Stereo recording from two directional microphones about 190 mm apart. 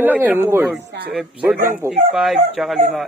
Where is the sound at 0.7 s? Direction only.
60° right (ahead or behind).